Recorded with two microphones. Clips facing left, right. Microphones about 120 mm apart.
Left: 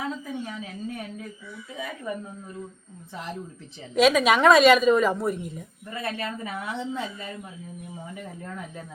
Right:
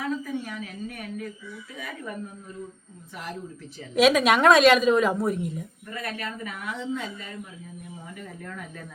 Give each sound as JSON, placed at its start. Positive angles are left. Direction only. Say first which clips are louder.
{"t": 0.0, "sound": "a sound", "louder": "right 2 dB", "side_deg": 25}
{"t": 3.9, "sound": "a woman's voice", "louder": "even", "side_deg": 0}
{"t": 5.9, "sound": "speech", "louder": "left 3 dB", "side_deg": 25}
{"t": 8.1, "sound": "speech", "louder": "left 1 dB", "side_deg": 25}